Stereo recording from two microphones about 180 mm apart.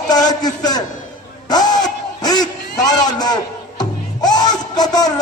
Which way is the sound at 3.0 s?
20° left (ahead or behind).